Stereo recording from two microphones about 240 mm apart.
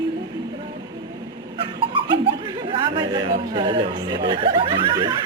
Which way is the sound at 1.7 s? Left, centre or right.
Centre.